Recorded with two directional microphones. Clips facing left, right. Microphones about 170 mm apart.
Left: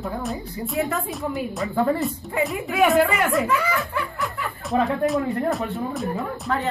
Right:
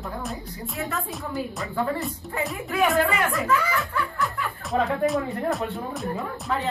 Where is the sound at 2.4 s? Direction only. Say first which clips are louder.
Left 4 dB; centre (ahead or behind).